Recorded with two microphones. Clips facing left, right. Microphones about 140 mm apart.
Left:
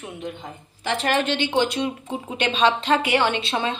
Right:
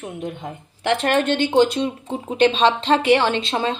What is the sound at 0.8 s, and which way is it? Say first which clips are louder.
Speech: right 4 dB; 55° right (ahead or behind).